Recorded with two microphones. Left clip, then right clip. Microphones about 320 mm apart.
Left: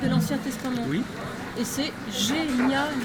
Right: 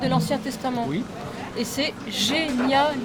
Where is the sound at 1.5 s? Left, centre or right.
Centre.